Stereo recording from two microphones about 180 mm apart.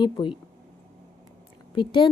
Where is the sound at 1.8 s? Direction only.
25° left (ahead or behind).